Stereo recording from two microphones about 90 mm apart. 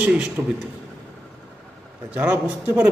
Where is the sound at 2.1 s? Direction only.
15° right (ahead or behind).